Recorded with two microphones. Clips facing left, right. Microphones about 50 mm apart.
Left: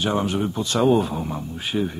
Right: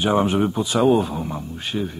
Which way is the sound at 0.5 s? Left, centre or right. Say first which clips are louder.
Left 1 dB; centre.